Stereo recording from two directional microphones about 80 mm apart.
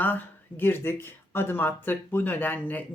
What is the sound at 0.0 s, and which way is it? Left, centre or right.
Speech, left.